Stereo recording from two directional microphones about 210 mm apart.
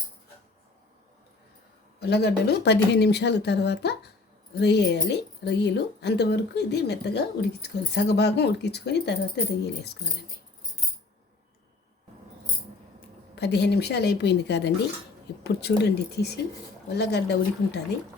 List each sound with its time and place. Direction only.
2.0 s speech: 50° left (ahead or behind)
13.3 s speech: 55° left (ahead or behind)